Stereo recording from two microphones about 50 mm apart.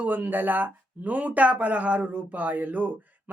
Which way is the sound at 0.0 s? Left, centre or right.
Right.